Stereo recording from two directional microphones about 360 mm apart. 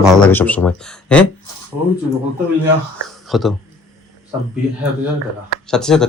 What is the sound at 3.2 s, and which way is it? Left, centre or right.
Speech, centre.